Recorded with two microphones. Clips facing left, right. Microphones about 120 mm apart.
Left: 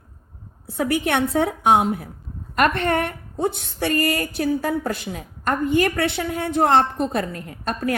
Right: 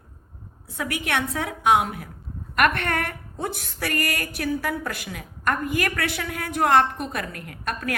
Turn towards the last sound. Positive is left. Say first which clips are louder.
# left 5 dB
turn(degrees=30)  # may be behind; listen again after turning